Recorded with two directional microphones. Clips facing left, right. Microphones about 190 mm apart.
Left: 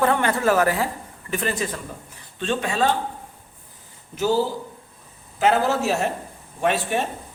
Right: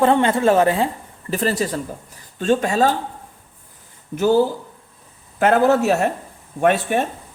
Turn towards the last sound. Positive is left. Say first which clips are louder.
# right 5 dB
turn(degrees=-55)  # may be behind; listen again after turning